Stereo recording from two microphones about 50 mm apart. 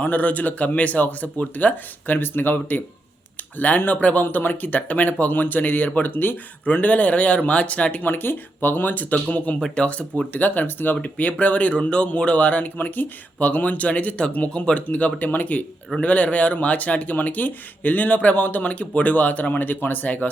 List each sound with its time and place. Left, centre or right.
0.0 s speech: left
6.7 s speech: left
8.0 s speech: left
9.6 s speech: centre
11.7 s speech: centre